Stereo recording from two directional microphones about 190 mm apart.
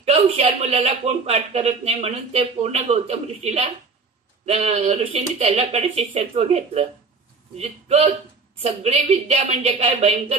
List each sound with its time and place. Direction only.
0.0 s a man's voice: 35° right (ahead or behind)